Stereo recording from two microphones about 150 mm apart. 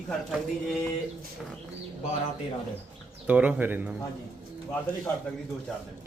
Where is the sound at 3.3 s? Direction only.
10° right (ahead or behind).